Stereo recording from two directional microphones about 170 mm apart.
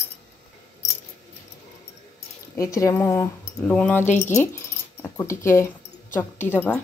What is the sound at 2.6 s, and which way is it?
Speech, 20° left (ahead or behind).